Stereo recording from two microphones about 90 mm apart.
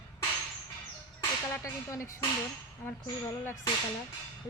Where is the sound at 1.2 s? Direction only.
30° left (ahead or behind).